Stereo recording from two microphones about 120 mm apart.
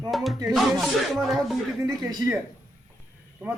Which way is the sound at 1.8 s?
30° right (ahead or behind).